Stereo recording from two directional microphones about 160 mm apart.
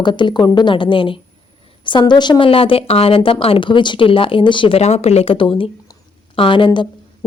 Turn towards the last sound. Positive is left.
turn(degrees=30)  # may be behind; listen again after turning